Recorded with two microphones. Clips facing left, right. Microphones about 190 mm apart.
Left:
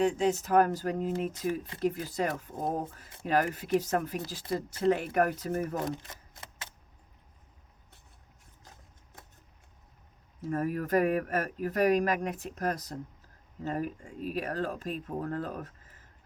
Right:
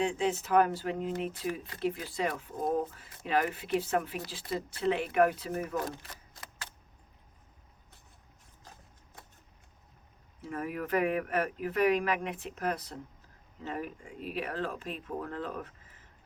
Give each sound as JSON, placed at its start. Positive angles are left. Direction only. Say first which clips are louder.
{"t": 0.0, "sound": "speech", "louder": "left 3 dB", "side_deg": 40}
{"t": 5.7, "sound": "camera", "louder": "left 1 dB", "side_deg": 25}
{"t": 10.4, "sound": "speech", "louder": "left 5 dB", "side_deg": 40}